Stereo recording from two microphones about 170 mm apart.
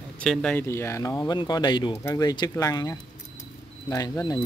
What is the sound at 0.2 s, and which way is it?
Speech, 5° left (ahead or behind).